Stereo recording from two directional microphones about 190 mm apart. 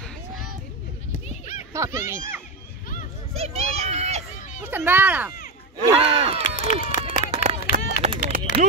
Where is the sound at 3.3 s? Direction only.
35° right (ahead or behind).